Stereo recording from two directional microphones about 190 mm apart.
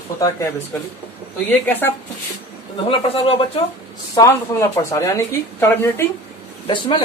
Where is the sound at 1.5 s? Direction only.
10° left (ahead or behind).